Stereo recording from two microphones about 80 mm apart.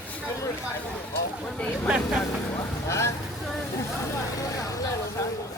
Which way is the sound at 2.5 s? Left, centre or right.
Left.